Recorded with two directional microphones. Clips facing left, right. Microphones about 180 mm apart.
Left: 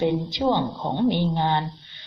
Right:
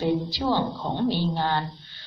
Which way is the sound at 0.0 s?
20° left (ahead or behind).